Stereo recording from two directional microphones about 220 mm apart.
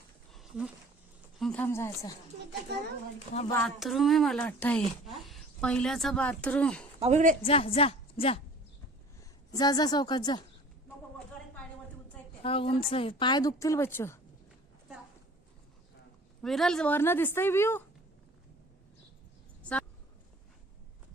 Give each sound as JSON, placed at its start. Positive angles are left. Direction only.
{"t": 0.3, "sound": "a sound", "side_deg": 0}
{"t": 1.4, "sound": "a woman's voice", "side_deg": 5}
{"t": 3.5, "sound": "speech", "side_deg": 0}
{"t": 7.0, "sound": "speech", "side_deg": -35}
{"t": 7.4, "sound": "a woman's voice", "side_deg": 25}
{"t": 9.5, "sound": "a woman's voice", "side_deg": 15}
{"t": 12.4, "sound": "a woman's voice", "side_deg": 25}
{"t": 16.4, "sound": "a woman's voice", "side_deg": 0}